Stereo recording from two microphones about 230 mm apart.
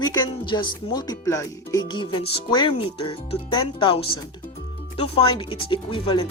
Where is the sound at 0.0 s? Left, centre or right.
Centre.